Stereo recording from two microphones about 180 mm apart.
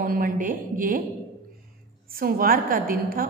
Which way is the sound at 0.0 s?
50° right (ahead or behind).